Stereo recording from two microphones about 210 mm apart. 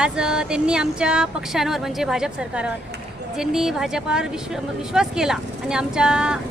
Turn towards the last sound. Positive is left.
turn(degrees=-5)  # may be behind; listen again after turning